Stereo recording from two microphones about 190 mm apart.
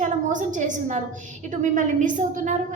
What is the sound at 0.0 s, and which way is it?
A woman's voice, 40° right (ahead or behind).